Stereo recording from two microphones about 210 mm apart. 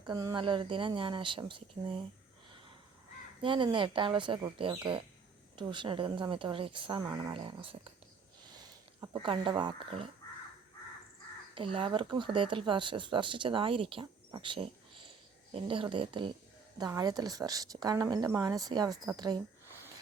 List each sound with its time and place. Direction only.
0.0 s speech: 20° right (ahead or behind)
3.4 s speech: 20° right (ahead or behind)
9.1 s speech: 25° right (ahead or behind)
11.5 s a woman's voice: 25° right (ahead or behind)